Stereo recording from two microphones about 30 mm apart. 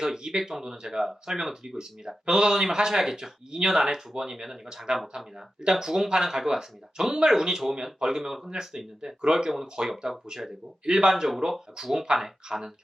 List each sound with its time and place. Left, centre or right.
0.0 s speech: centre
10.0 s speech: right
11.1 s speech: centre